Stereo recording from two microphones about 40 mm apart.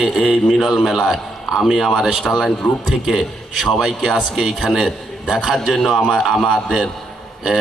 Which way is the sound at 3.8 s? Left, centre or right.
Centre.